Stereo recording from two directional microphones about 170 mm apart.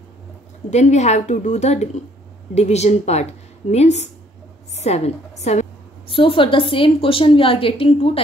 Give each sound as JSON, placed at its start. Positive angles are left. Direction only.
{"t": 0.7, "sound": "a woman's voice", "side_deg": 40}